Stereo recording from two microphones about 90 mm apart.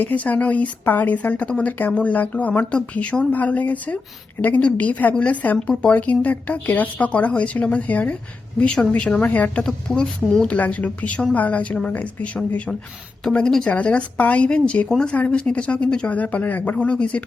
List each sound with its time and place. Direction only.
0.0 s a woman's voice: 20° left (ahead or behind)
10.5 s a woman's voice: 15° left (ahead or behind)